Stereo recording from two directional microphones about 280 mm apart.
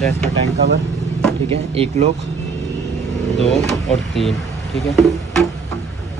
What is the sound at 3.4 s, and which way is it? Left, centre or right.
Speech, centre.